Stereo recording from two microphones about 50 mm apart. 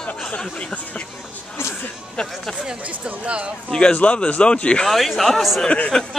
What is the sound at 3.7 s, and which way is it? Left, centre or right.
Speech, left.